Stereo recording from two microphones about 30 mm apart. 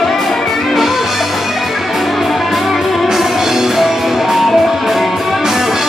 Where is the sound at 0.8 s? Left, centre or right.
Centre.